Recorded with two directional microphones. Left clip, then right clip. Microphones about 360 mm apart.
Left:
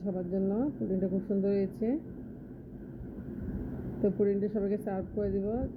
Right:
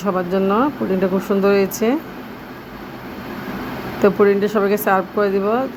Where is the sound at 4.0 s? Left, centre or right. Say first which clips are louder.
Right 15 dB; right.